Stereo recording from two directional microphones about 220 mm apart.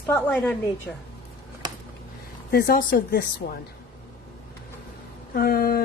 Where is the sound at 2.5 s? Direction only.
45° left (ahead or behind).